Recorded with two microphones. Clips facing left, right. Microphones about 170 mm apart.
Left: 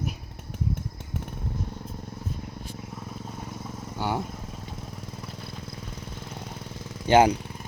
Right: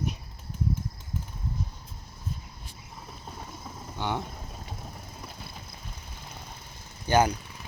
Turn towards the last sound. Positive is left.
turn(degrees=25)  # may be behind; listen again after turning